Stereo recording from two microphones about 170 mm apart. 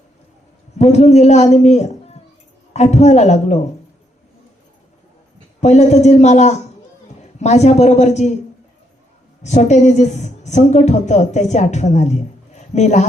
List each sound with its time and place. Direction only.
0.8 s a man's voice: 40° left (ahead or behind)
5.5 s a man's voice: 40° left (ahead or behind)
9.4 s a woman's voice: 45° left (ahead or behind)